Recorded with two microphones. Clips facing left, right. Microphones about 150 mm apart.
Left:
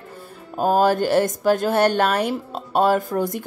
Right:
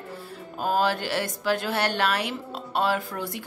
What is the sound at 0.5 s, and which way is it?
A woman's voice, 45° left (ahead or behind).